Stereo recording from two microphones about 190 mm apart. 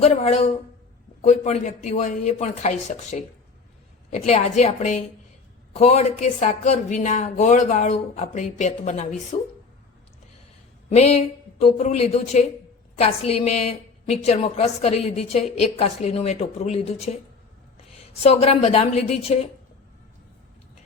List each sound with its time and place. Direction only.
0.0 s a woman's voice: 35° left (ahead or behind)
4.3 s a woman's voice: 35° left (ahead or behind)
10.8 s a woman's voice: 35° left (ahead or behind)
18.2 s a woman's voice: 35° left (ahead or behind)